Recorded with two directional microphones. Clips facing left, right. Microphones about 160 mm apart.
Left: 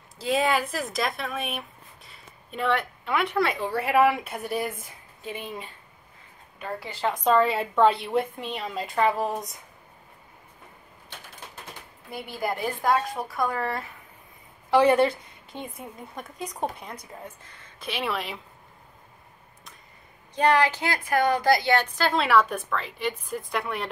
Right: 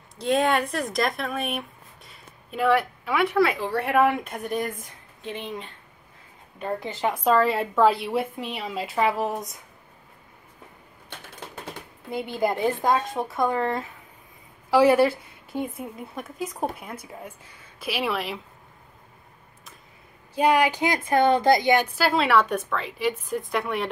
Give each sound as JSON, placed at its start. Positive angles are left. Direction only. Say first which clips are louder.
{"t": 0.2, "sound": "speech", "louder": "right 2 dB", "side_deg": 0}
{"t": 6.6, "sound": "a woman's voice", "louder": "right 3 dB", "side_deg": -20}
{"t": 7.2, "sound": "speech", "louder": "right 1 dB", "side_deg": 0}
{"t": 12.1, "sound": "a woman's voice", "louder": "right 5 dB", "side_deg": -25}
{"t": 14.7, "sound": "a woman's voice", "louder": "right 2 dB", "side_deg": -10}
{"t": 20.3, "sound": "a woman's voice", "louder": "right 1 dB", "side_deg": -10}